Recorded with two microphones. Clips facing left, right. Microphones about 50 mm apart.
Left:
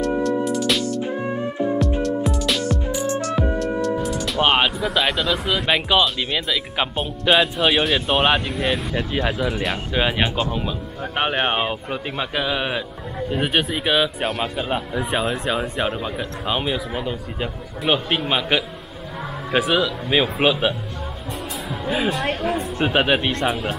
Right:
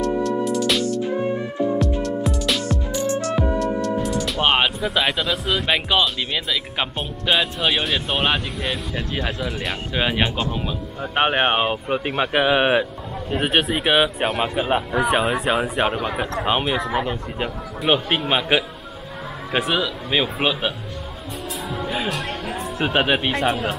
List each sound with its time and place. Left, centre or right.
0.2 s music: centre
1.6 s music: left
2.0 s music: centre
3.3 s speech: centre
11.1 s speech: centre
13.4 s a man's voice: centre
13.7 s a man's voice: centre
15.6 s a man's voice: centre
16.2 s speech: right
16.6 s a man's voice: centre
21.6 s music: centre
22.4 s speech: centre